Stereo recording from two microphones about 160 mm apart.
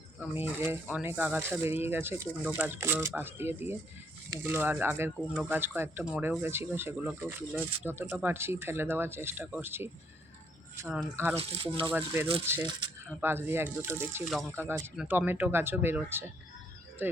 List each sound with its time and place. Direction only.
0.2 s speech: 10° right (ahead or behind)
11.3 s speech: 35° right (ahead or behind)
11.9 s speech: 15° right (ahead or behind)